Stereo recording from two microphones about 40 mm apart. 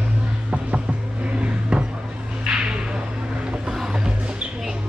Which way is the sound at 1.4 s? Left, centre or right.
Right.